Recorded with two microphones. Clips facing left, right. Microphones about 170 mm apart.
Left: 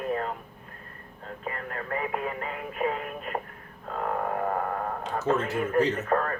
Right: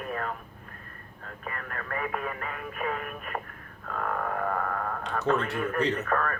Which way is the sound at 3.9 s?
25° left (ahead or behind).